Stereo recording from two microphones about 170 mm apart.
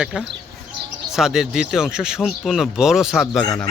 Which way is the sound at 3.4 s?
25° left (ahead or behind).